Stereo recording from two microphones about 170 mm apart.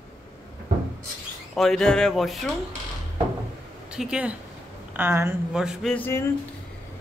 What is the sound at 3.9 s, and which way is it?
Speech, 5° right (ahead or behind).